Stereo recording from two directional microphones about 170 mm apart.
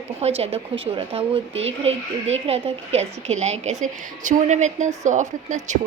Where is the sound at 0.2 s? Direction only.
40° right (ahead or behind).